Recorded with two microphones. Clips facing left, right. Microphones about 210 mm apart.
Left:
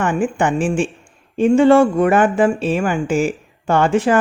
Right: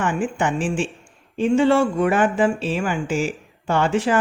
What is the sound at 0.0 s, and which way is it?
Speech, 50° left (ahead or behind).